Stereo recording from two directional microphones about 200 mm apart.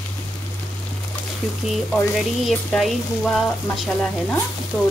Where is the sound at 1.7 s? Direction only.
Centre (ahead or behind).